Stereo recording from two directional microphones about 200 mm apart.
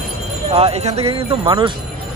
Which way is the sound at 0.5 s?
30° right (ahead or behind).